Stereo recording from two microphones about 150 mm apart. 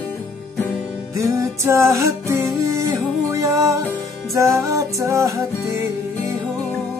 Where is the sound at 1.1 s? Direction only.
20° right (ahead or behind).